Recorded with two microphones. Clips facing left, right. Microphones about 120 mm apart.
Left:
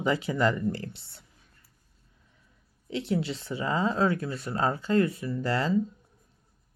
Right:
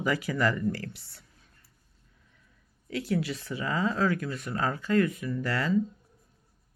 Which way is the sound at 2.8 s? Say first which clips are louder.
Left 1 dB; 25° left (ahead or behind).